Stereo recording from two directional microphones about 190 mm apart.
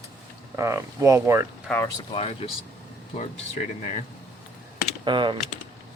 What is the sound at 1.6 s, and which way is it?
Speech, 10° left (ahead or behind).